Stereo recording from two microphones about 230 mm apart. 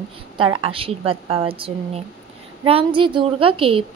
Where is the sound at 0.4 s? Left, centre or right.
Right.